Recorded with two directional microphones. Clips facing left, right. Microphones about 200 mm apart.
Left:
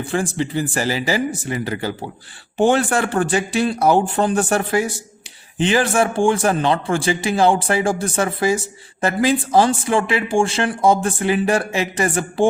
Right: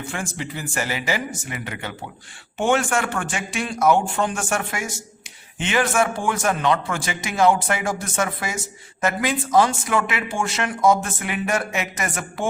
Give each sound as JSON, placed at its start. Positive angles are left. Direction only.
{"t": 0.0, "sound": "a man's voice", "side_deg": 35}